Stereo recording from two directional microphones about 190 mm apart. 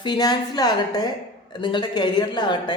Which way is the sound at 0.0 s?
20° left (ahead or behind).